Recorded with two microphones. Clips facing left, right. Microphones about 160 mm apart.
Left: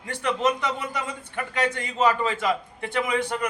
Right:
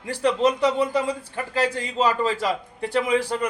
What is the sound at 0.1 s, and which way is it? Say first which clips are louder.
A man's voice: right 4 dB; 35° right (ahead or behind).